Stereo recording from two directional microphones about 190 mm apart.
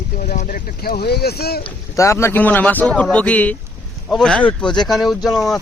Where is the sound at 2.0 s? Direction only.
15° left (ahead or behind).